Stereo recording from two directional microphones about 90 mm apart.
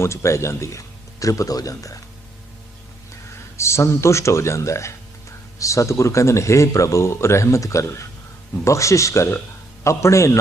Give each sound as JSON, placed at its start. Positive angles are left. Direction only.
{"t": 0.0, "sound": "speech", "side_deg": 30}
{"t": 3.6, "sound": "speech", "side_deg": 30}